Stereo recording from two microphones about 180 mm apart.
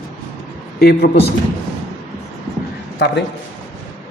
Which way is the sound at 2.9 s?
70° left (ahead or behind).